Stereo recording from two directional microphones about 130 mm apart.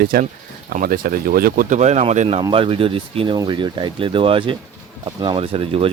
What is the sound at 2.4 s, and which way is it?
Speech, 40° right (ahead or behind).